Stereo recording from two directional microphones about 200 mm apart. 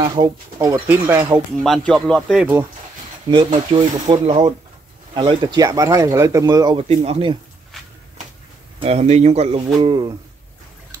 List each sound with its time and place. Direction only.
0.0 s speech: 20° right (ahead or behind)
1.6 s speech: centre (ahead or behind)
3.3 s speech: 25° right (ahead or behind)
8.7 s speech: 30° right (ahead or behind)